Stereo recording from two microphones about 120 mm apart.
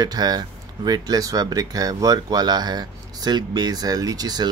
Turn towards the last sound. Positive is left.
turn(degrees=-35)  # may be behind; listen again after turning